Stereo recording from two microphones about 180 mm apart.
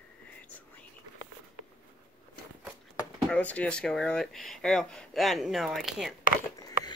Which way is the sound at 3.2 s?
5° left (ahead or behind).